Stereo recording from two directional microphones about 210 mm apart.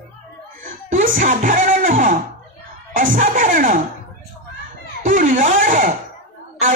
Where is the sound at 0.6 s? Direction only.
40° right (ahead or behind).